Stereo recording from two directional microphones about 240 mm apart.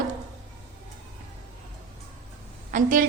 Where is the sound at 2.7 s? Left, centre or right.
Right.